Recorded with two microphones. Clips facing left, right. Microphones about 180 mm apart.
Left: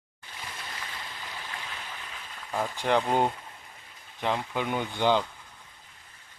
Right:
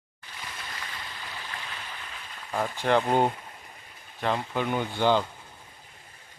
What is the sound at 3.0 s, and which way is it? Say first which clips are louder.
Speech: right 2 dB; 15° right (ahead or behind).